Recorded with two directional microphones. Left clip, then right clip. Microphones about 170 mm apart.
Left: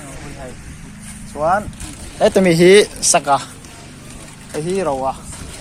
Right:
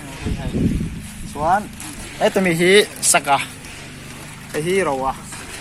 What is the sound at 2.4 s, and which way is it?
Speech, 60° left (ahead or behind).